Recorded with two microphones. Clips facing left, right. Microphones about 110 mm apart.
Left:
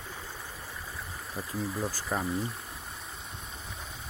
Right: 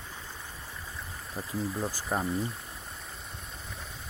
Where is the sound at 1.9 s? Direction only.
15° right (ahead or behind).